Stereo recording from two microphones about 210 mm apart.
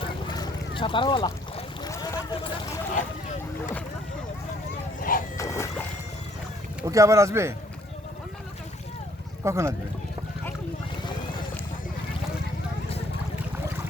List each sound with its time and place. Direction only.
0.0 s boat: 20° left (ahead or behind)
4.9 s vehicle: 40° left (ahead or behind)
5.4 s dog: 15° left (ahead or behind)
6.8 s speech: 15° right (ahead or behind)
9.4 s speech: 15° right (ahead or behind)
11.0 s vehicle: 20° left (ahead or behind)